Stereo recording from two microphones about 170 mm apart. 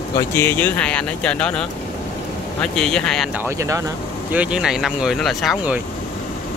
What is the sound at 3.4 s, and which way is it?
Speech, 20° right (ahead or behind).